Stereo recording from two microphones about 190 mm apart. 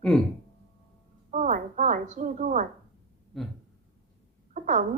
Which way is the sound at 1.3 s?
40° right (ahead or behind).